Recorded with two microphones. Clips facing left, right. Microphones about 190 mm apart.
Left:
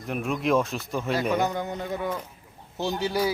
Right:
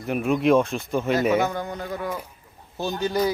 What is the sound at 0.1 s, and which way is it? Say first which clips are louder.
Speech: right 5 dB; centre (ahead or behind).